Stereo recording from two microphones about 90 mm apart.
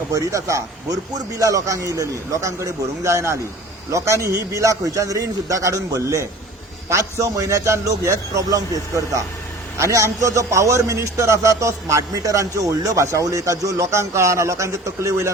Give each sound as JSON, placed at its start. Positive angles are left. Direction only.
{"t": 0.1, "sound": "a man's voice", "side_deg": -40}